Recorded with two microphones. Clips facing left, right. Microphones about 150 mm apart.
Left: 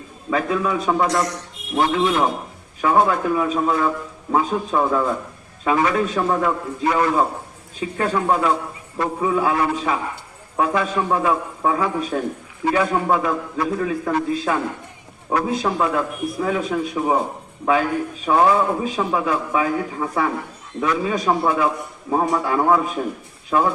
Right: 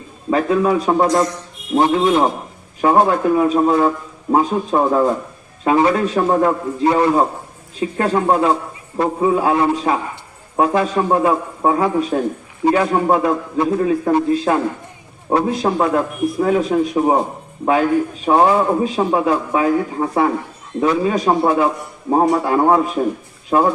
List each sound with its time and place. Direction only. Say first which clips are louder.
0.3 s a man's voice: right 6 dB; 35° right (ahead or behind)
18.3 s a man's voice: right 3 dB; 30° right (ahead or behind)